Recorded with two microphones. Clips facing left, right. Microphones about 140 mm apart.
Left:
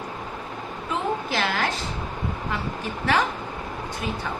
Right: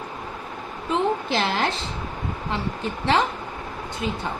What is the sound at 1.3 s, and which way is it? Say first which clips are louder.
Speech: right 2 dB; 25° right (ahead or behind).